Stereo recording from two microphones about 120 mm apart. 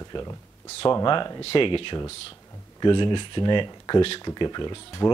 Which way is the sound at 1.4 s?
50° left (ahead or behind).